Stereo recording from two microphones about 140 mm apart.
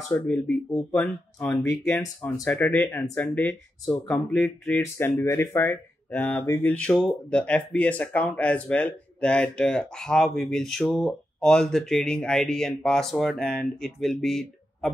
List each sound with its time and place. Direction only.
0.1 s speech: 10° left (ahead or behind)
2.6 s speech: 5° left (ahead or behind)